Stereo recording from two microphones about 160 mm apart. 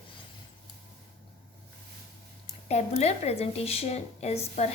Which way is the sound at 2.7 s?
45° left (ahead or behind).